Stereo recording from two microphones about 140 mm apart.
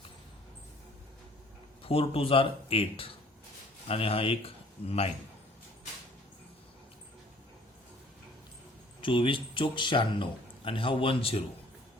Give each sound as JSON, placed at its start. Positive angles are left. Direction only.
{"t": 1.8, "sound": "speech", "side_deg": 45}
{"t": 9.0, "sound": "speech", "side_deg": 35}